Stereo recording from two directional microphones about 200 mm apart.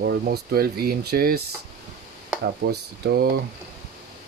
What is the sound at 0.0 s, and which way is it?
Speech, 55° right (ahead or behind).